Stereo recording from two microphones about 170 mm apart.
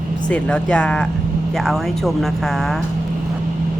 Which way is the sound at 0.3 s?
5° left (ahead or behind).